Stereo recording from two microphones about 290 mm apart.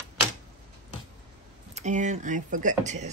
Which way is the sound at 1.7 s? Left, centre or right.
Right.